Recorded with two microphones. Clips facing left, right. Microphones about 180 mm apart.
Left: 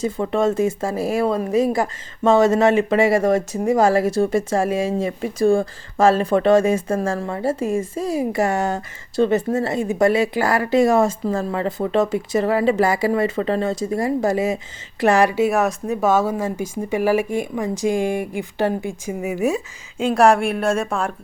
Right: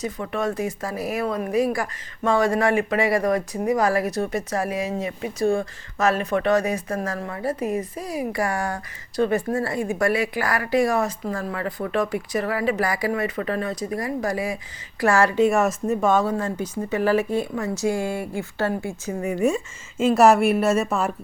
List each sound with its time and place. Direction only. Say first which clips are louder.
0.0 s speech: left 6 dB; 30° left (ahead or behind)
19.2 s speech: left 1 dB; 5° left (ahead or behind)